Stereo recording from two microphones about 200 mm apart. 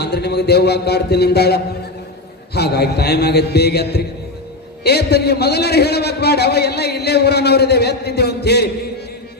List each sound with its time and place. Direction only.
0.0 s a man's voice: 55° left (ahead or behind)